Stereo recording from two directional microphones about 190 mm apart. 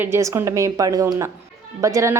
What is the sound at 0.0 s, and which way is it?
A woman's voice, 15° right (ahead or behind).